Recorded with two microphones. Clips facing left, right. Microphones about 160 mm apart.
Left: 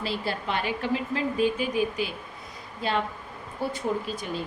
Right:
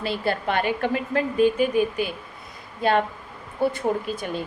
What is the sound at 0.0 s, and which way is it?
A woman's voice, 55° right (ahead or behind).